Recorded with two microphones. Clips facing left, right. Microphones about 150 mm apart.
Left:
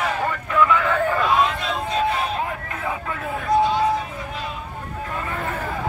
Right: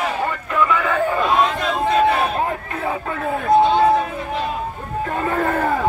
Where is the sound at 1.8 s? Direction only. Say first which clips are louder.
Right 7 dB; 60° right (ahead or behind).